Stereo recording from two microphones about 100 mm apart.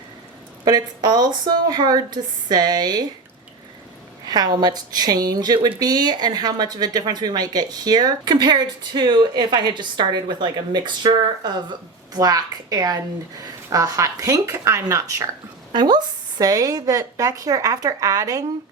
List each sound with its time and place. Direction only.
0.6 s a woman's voice: 45° right (ahead or behind)
4.3 s a woman's voice: 45° right (ahead or behind)
15.7 s a woman's voice: 45° right (ahead or behind)